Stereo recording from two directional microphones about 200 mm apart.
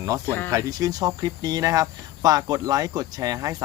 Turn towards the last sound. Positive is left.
turn(degrees=-15)  # may be behind; listen again after turning